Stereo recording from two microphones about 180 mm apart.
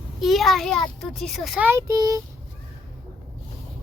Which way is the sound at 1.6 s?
15° right (ahead or behind).